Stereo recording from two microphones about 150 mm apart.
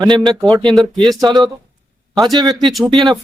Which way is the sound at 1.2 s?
30° right (ahead or behind).